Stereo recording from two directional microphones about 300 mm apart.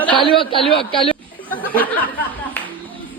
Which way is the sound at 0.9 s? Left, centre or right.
Centre.